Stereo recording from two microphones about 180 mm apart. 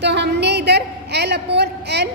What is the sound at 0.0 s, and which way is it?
A woman's voice, 70° right (ahead or behind).